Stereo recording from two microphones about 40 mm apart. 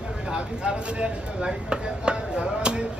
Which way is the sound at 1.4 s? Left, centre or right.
Right.